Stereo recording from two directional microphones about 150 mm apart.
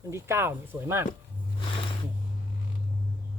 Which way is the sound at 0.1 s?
15° right (ahead or behind).